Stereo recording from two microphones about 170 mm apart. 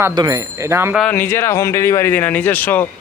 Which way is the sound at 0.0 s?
20° right (ahead or behind).